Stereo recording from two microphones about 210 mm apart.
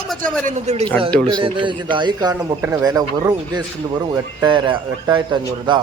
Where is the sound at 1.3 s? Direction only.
25° right (ahead or behind).